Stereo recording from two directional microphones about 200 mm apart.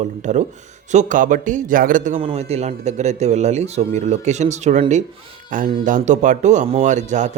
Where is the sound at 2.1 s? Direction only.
30° right (ahead or behind).